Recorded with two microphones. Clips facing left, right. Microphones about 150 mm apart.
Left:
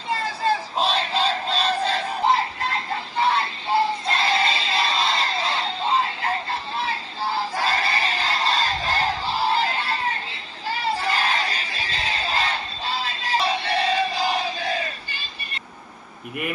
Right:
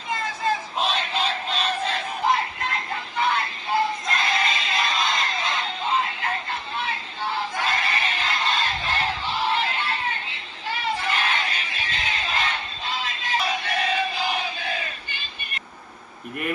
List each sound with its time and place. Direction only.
0.1 s crowd: 35° left (ahead or behind)